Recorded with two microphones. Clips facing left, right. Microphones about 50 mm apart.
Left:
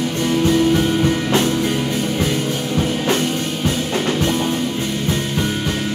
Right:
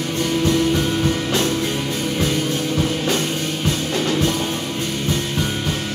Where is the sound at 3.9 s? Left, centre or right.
Centre.